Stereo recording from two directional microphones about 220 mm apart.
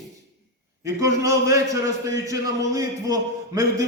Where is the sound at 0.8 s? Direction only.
15° right (ahead or behind).